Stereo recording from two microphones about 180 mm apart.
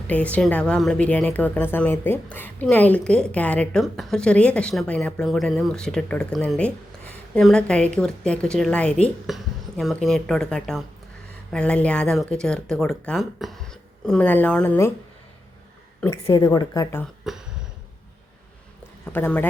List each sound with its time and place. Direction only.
0.1 s a woman's voice: 10° left (ahead or behind)
16.3 s a woman's voice: 20° left (ahead or behind)
17.3 s a woman's voice: centre (ahead or behind)
19.0 s speech: 10° left (ahead or behind)